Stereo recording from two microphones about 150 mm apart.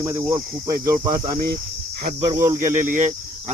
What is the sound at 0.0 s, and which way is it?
Speech, 20° right (ahead or behind).